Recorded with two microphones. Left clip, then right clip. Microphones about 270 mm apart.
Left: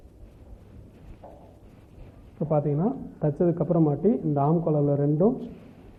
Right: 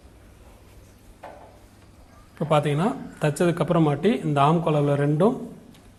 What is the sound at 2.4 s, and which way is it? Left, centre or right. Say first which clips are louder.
Speech: right 4 dB; right.